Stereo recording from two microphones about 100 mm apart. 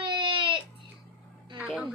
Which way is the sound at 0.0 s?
50° right (ahead or behind).